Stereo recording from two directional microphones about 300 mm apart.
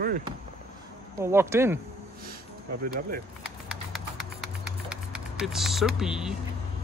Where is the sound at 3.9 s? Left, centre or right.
Centre.